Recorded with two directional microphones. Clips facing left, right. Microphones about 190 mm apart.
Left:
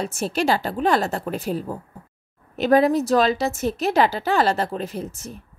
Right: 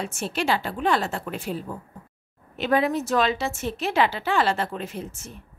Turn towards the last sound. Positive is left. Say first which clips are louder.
# left 4 dB
turn(degrees=40)  # may be behind; listen again after turning